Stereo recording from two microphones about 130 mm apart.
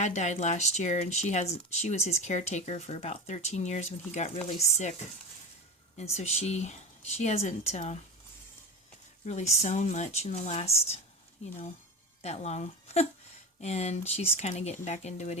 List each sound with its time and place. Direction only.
0.0 s speech: 65° left (ahead or behind)
6.0 s speech: 55° left (ahead or behind)
9.2 s speech: 65° left (ahead or behind)
12.2 s speech: 55° left (ahead or behind)